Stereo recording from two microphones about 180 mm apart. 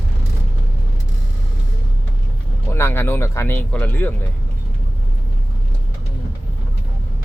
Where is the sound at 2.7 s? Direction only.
15° left (ahead or behind).